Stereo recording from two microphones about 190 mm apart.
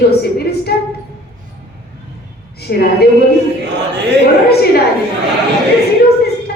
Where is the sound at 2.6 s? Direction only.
55° left (ahead or behind).